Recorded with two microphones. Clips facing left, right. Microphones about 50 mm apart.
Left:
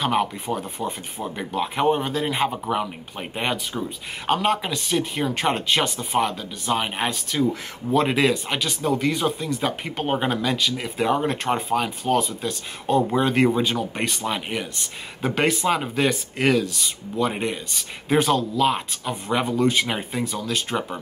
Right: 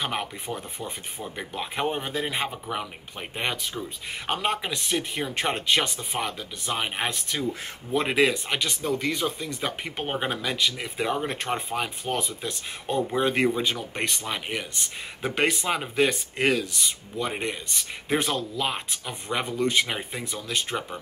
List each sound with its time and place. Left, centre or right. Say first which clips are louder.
0.0 s speech: left 8 dB; centre